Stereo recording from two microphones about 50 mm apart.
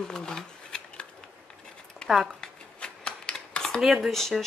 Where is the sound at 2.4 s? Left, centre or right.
Centre.